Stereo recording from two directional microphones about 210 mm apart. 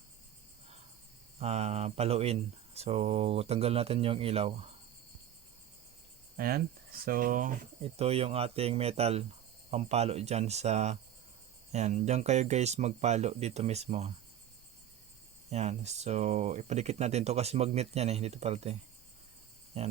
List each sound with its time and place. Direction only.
1.4 s speech: 30° right (ahead or behind)
6.3 s speech: 45° right (ahead or behind); by 14.1 s 30° right (ahead or behind)
15.4 s speech: 30° right (ahead or behind)